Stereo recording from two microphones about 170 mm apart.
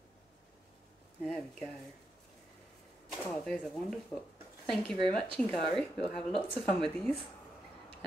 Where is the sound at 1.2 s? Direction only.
5° left (ahead or behind).